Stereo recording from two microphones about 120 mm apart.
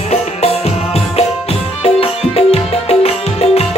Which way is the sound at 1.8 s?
55° left (ahead or behind).